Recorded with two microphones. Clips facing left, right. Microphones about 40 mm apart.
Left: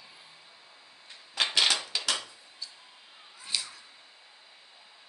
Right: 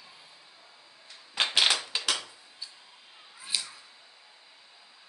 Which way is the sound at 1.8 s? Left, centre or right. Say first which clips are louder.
Right 1 dB; right.